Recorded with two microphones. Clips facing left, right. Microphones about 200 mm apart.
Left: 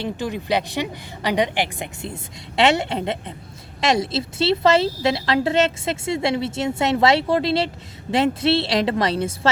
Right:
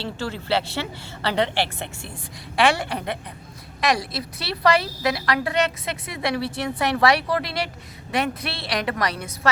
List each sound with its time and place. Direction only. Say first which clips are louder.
0.0 s a woman's voice: left 4 dB; 15° left (ahead or behind)